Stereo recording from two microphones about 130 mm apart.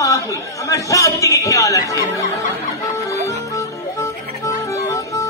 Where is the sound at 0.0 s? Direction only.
25° left (ahead or behind).